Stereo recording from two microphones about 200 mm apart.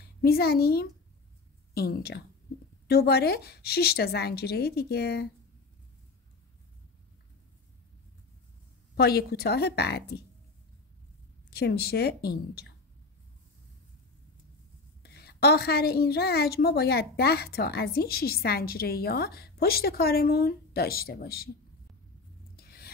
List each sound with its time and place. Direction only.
0.2 s a woman's voice: 50° left (ahead or behind)
8.9 s a woman's voice: 50° left (ahead or behind)
11.5 s a woman's voice: 50° left (ahead or behind)
15.0 s a woman's voice: 55° left (ahead or behind)
22.6 s a sound: 50° left (ahead or behind)